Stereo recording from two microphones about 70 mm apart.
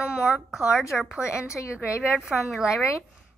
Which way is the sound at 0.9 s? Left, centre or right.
Centre.